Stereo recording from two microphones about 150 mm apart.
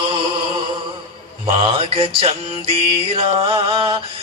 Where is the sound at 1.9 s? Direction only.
40° right (ahead or behind).